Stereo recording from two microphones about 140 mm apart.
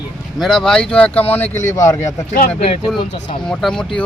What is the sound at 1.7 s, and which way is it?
Speech, 20° left (ahead or behind).